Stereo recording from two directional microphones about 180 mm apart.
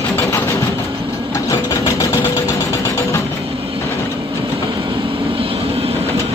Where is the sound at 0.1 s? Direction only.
15° left (ahead or behind).